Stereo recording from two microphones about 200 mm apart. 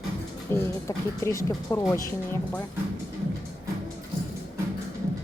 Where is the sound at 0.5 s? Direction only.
15° left (ahead or behind).